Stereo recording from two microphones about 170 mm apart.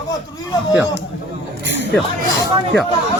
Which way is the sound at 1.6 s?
90° right.